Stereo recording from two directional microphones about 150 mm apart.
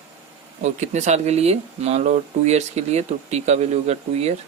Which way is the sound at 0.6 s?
50° right (ahead or behind).